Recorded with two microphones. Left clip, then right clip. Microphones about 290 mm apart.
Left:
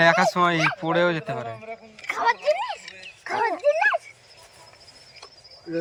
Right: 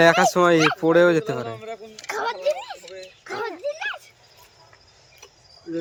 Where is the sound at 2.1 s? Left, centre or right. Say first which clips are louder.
Left 2 dB; centre.